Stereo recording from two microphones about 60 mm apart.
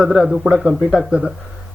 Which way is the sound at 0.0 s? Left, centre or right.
Centre.